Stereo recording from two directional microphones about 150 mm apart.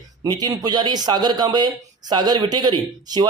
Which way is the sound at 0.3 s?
25° right (ahead or behind).